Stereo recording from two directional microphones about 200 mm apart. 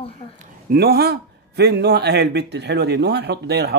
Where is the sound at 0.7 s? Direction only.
50° right (ahead or behind).